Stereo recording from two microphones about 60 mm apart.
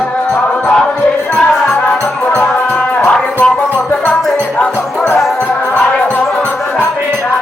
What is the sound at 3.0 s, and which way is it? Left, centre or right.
Music, left.